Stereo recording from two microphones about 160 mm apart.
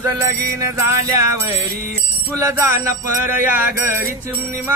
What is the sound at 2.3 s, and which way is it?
Music, 15° right (ahead or behind).